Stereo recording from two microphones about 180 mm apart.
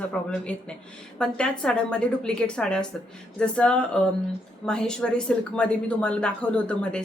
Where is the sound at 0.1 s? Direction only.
5° left (ahead or behind).